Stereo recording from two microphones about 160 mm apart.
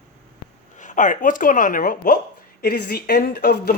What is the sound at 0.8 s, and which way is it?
Speech, 50° left (ahead or behind).